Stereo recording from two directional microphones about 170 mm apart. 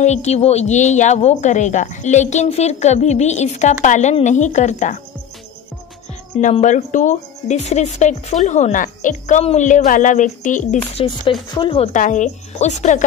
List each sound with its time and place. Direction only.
0.0 s speech: 40° left (ahead or behind)
6.6 s speech: 45° left (ahead or behind)
11.0 s chopping: 30° left (ahead or behind)
11.5 s a woman's voice: 30° left (ahead or behind)
11.9 s speech: 45° left (ahead or behind)